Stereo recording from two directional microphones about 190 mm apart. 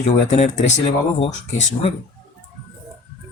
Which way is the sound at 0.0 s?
35° left (ahead or behind).